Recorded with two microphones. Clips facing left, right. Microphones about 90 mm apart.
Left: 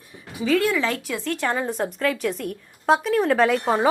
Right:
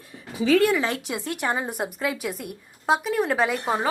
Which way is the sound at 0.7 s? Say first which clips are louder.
Left 1 dB; 25° right (ahead or behind).